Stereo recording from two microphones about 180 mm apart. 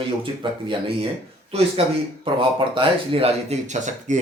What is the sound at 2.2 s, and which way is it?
Speech, 30° right (ahead or behind).